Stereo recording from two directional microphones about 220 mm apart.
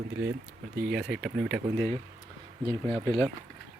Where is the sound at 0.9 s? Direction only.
Centre (ahead or behind).